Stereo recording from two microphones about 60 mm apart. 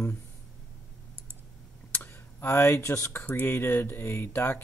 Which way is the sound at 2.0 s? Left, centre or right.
Left.